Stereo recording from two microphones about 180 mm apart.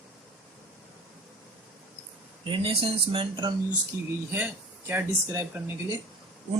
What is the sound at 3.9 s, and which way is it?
Speech, 15° right (ahead or behind).